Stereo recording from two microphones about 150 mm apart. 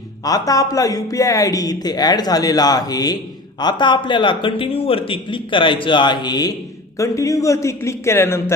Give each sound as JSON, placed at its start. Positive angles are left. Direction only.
{"t": 0.3, "sound": "speech", "side_deg": 25}